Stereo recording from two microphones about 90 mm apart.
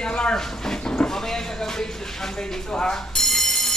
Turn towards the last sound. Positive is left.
turn(degrees=5)  # may be behind; listen again after turning